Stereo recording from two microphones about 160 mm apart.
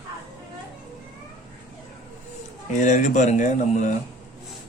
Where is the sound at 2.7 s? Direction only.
50° left (ahead or behind).